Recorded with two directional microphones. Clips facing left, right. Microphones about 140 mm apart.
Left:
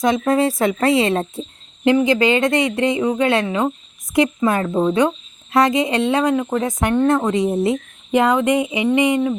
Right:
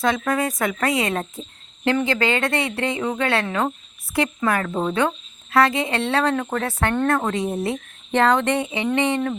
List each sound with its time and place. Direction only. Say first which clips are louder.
0.0 s speech: left 5 dB; 25° left (ahead or behind)
8.1 s speech: left 3 dB; 10° left (ahead or behind)